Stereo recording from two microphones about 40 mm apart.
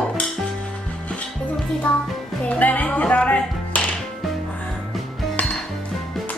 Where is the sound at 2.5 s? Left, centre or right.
Left.